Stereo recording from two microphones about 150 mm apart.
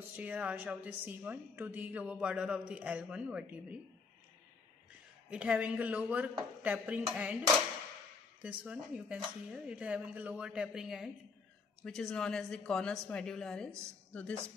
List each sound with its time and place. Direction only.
0.1 s speech: 10° right (ahead or behind)
5.3 s speech: 10° right (ahead or behind)
8.4 s a woman's voice: 10° right (ahead or behind); by 14.3 s 5° left (ahead or behind)